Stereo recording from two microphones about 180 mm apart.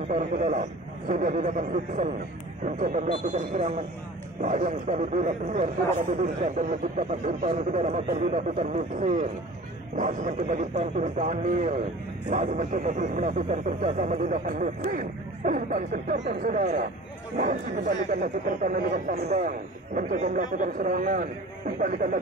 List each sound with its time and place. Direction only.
0.1 s a man's voice: 45° right (ahead or behind)
18.2 s a man's voice: 45° right (ahead or behind)